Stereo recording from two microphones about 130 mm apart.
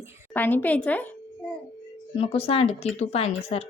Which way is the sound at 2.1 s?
45° left (ahead or behind).